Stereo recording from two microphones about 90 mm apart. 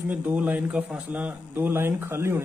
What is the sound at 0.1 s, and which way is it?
Speech, 20° right (ahead or behind).